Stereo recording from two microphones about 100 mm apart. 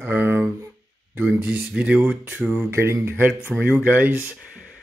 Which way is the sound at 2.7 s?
25° right (ahead or behind).